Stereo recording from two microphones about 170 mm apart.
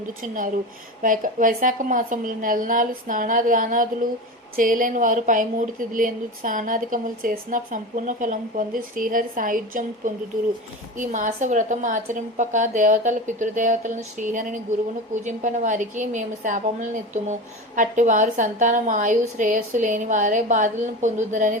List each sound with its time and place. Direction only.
0.2 s a woman's voice: 50° right (ahead or behind)